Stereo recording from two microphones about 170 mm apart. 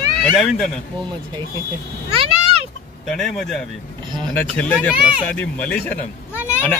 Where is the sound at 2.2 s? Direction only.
40° right (ahead or behind).